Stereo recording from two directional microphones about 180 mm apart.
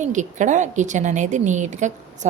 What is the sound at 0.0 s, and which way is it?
A woman's voice, 45° right (ahead or behind).